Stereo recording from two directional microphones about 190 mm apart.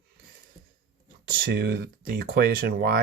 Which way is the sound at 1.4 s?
55° right (ahead or behind).